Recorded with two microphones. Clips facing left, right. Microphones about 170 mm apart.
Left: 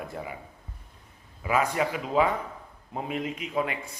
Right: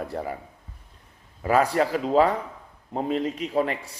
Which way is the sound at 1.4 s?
35° right (ahead or behind).